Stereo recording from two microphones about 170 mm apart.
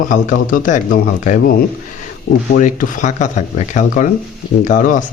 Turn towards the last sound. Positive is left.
turn(degrees=50)  # may be behind; listen again after turning